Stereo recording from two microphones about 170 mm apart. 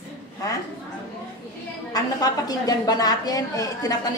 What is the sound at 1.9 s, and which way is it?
A woman's voice, 20° left (ahead or behind).